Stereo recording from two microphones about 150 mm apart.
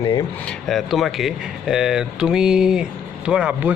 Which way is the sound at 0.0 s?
25° left (ahead or behind).